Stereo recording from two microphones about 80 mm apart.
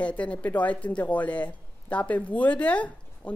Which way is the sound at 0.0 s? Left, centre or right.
Centre.